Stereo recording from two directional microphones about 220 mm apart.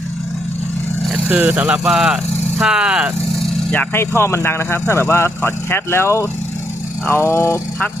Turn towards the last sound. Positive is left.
turn(degrees=10)  # may be behind; listen again after turning